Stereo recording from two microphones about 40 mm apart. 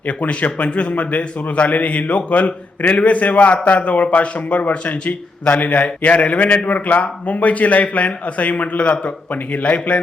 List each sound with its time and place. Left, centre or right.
0.0 s a man's voice: left